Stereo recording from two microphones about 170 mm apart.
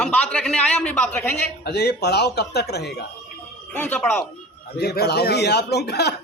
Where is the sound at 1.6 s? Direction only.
75° left (ahead or behind).